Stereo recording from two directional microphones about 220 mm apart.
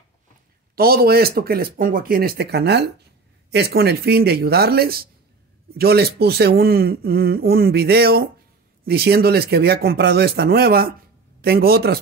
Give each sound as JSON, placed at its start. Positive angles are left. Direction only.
{"t": 0.7, "sound": "speech", "side_deg": -45}